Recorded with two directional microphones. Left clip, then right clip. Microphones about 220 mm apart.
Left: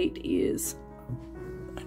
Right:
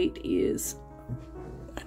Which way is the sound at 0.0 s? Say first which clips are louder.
Right 1 dB; centre (ahead or behind).